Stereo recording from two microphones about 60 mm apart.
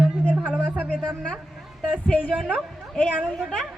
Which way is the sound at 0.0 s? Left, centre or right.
Centre.